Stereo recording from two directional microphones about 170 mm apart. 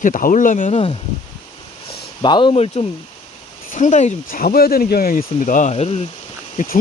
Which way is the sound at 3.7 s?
45° left (ahead or behind).